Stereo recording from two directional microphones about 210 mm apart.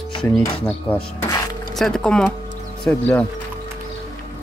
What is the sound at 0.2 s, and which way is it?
Speech, 5° left (ahead or behind).